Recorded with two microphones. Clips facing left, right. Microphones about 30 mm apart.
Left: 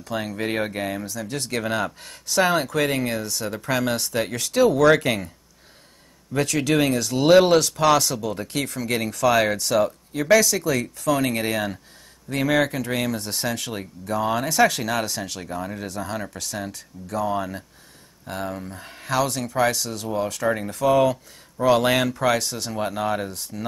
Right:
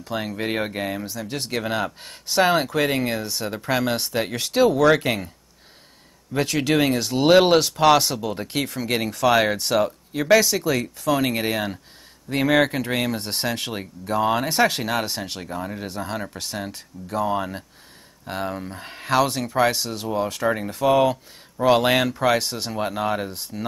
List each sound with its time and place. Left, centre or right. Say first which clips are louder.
0.0 s speech: even; centre
2.0 s speech: right 1 dB; right
2.7 s speech: right 1 dB; centre
6.3 s speech: even; right
12.3 s speech: right 2 dB; right
15.4 s speech: even; centre
15.9 s speech: even; right
20.4 s speech: even; centre
20.7 s speech: even; centre
22.4 s speech: right 1 dB; right
22.7 s speech: even; centre